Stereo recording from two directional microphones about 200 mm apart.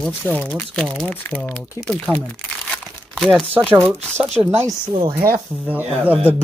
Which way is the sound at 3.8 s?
10° right (ahead or behind).